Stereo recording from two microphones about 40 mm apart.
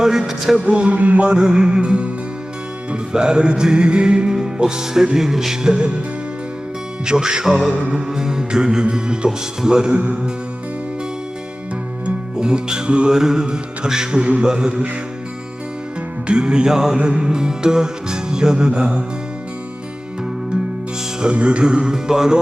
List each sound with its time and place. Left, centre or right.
0.6 s a sound: right
1.4 s music: centre
7.0 s music: centre
12.0 s music: right
16.2 s music: right
21.2 s music: right